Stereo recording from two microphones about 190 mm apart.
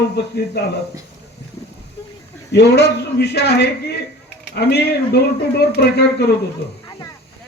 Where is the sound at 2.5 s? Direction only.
60° left (ahead or behind).